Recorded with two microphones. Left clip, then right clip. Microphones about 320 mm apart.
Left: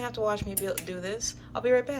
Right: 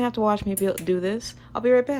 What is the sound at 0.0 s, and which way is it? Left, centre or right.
Speech, right.